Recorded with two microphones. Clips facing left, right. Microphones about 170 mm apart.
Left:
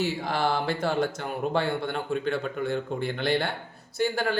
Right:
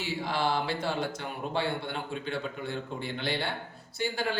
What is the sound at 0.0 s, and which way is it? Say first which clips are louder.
Speech: left 4 dB; 45° left (ahead or behind).